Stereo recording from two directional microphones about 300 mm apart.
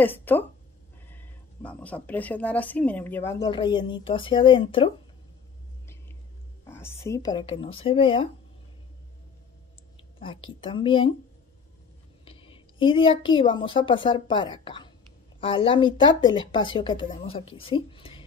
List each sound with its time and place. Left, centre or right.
0.0 s speech: centre
6.6 s speech: centre
10.1 s a woman's voice: centre
12.3 s speech: centre